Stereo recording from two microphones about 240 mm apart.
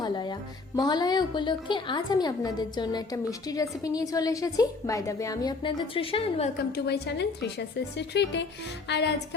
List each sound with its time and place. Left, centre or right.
0.0 s a woman's voice: centre
6.7 s a woman's voice: left